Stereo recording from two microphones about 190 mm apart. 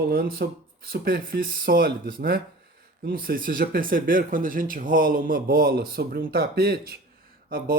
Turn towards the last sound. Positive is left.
turn(degrees=-50)  # may be behind; listen again after turning